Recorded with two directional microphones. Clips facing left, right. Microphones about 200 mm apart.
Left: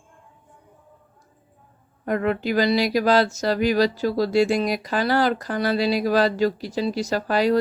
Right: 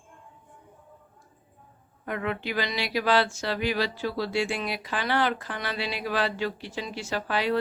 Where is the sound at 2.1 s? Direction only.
40° left (ahead or behind).